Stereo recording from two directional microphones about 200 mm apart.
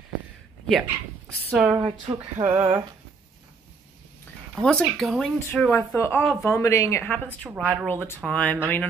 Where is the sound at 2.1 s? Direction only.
30° right (ahead or behind).